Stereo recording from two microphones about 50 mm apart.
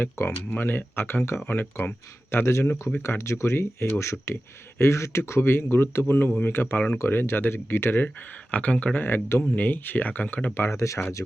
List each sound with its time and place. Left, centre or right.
0.2 s speech: left
0.5 s speech: left
3.0 s speech: left
3.9 s speech: left
8.4 s speech: left
9.0 s speech: left
9.4 s speech: left
10.7 s speech: left